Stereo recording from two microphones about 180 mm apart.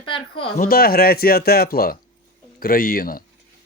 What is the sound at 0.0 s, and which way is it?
Speech, 30° left (ahead or behind).